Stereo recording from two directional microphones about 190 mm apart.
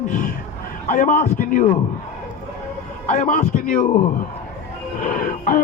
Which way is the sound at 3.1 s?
40° left (ahead or behind).